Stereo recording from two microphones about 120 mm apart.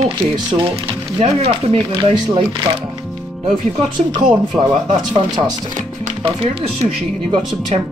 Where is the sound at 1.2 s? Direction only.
55° right (ahead or behind).